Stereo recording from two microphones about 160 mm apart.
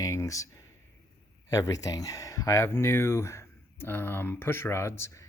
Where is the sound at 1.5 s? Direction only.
20° left (ahead or behind).